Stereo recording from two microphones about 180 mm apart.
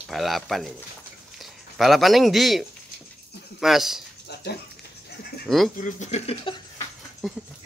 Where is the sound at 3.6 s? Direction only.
Centre (ahead or behind).